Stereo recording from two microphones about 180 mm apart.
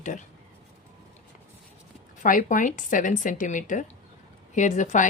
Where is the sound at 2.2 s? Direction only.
45° left (ahead or behind).